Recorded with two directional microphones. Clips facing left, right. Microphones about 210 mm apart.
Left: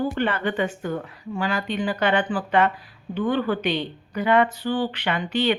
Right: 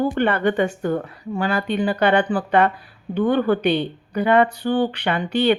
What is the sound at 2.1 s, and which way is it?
Speech, 60° right (ahead or behind).